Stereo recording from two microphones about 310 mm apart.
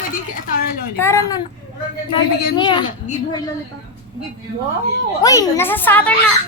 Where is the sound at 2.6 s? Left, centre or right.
Centre.